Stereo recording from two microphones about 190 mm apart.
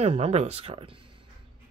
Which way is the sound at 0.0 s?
35° right (ahead or behind).